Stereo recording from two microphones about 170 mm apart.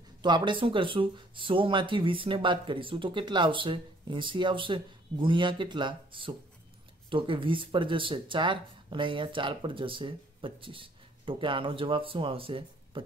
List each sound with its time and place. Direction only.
0.2 s speech: 25° right (ahead or behind)